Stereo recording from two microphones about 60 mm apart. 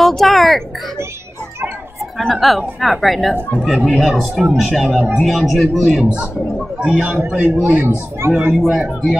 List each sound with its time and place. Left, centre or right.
0.0 s a sound: centre
2.3 s a woman's voice: centre
5.9 s a man's voice: centre
7.7 s speech: right